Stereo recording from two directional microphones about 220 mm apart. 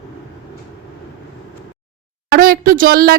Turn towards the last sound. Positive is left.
turn(degrees=-40)  # may be behind; listen again after turning